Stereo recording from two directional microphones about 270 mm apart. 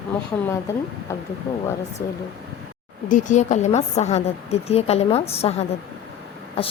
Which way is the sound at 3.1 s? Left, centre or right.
Left.